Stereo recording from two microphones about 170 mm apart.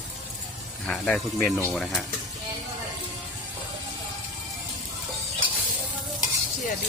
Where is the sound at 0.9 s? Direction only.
5° left (ahead or behind).